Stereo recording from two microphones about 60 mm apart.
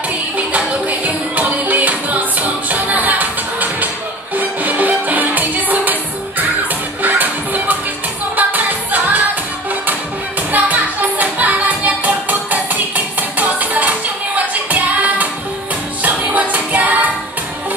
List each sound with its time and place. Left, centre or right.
0.5 s music: right
7.0 s music: right
10.5 s music: right